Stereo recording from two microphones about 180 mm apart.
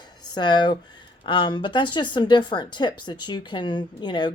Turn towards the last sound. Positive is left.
turn(degrees=25)  # may be behind; listen again after turning